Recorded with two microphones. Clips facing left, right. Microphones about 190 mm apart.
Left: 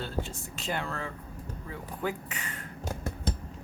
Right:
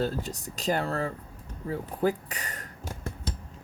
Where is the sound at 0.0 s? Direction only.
40° right (ahead or behind).